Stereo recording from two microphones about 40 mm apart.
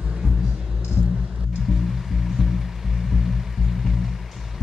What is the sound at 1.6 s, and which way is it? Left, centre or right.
Music, centre.